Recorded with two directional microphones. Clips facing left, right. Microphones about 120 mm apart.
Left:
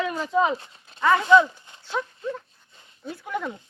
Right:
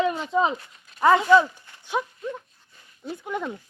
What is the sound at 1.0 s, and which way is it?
Speech, 25° right (ahead or behind).